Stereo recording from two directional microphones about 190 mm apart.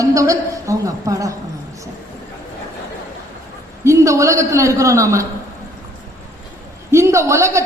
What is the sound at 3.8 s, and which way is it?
A woman's voice, 15° right (ahead or behind).